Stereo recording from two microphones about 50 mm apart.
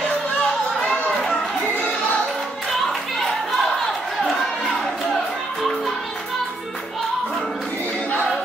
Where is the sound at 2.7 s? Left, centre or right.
Centre.